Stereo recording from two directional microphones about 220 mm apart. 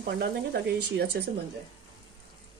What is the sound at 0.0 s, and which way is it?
Speech, 45° right (ahead or behind).